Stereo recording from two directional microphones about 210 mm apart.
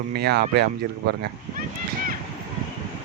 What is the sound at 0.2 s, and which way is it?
Speech, 50° right (ahead or behind).